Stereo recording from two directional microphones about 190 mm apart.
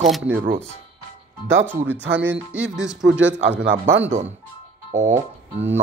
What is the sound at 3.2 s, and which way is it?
Speech, 75° right (ahead or behind).